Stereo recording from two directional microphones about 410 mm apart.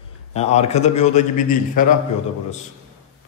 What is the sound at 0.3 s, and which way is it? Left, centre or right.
A man's voice, centre.